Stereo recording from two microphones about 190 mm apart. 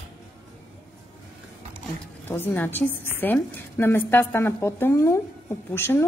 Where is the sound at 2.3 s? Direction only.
10° left (ahead or behind).